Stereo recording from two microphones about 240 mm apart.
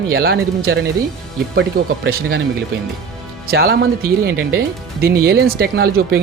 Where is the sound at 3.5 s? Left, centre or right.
Right.